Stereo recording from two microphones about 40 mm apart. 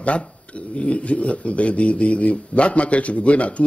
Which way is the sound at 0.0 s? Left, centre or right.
Left.